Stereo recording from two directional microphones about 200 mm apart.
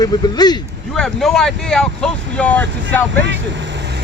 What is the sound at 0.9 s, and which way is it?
Speech, 5° left (ahead or behind).